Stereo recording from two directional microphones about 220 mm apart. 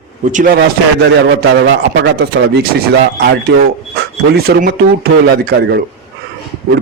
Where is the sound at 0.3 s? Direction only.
35° right (ahead or behind).